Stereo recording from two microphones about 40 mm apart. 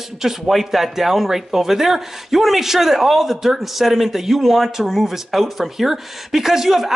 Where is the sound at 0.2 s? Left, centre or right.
Centre.